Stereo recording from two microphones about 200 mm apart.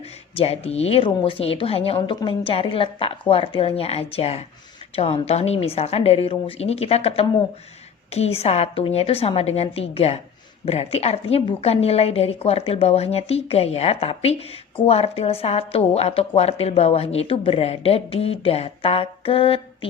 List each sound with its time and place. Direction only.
0.3 s a woman's voice: 30° left (ahead or behind)